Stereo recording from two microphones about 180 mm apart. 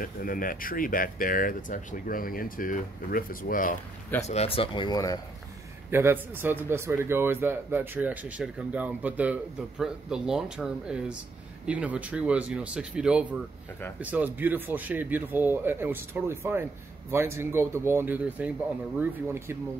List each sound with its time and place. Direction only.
0.0 s speech: 50° left (ahead or behind)
4.3 s speech: 35° left (ahead or behind)
5.9 s a man's voice: 15° right (ahead or behind)